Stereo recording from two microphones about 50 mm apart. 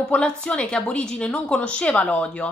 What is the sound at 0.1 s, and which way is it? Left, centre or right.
Speech, left.